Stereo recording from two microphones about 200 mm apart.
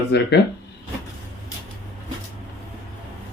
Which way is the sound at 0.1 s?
55° left (ahead or behind).